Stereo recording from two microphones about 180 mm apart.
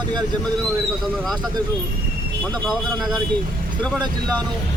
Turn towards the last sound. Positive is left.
turn(degrees=10)  # may be behind; listen again after turning